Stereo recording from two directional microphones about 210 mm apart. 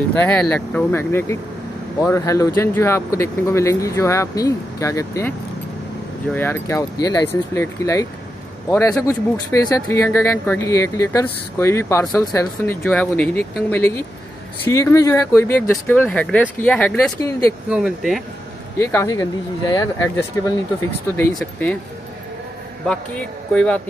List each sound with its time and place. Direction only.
0.1 s speech: 5° left (ahead or behind)
6.3 s a man's voice: 10° left (ahead or behind)
18.8 s speech: 15° left (ahead or behind)
21.2 s speech: 5° left (ahead or behind)
22.8 s a man's voice: 5° left (ahead or behind)